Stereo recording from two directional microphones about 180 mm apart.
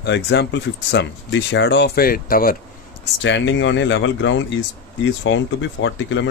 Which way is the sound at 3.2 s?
90° left.